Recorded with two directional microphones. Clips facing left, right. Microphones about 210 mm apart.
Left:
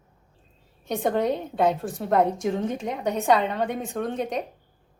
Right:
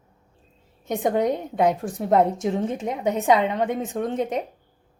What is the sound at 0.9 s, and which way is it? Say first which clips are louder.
A woman's voice: right 2 dB; 15° right (ahead or behind).